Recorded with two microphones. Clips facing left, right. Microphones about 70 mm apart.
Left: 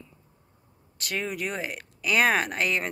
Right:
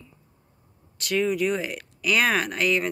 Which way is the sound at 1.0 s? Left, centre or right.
Left.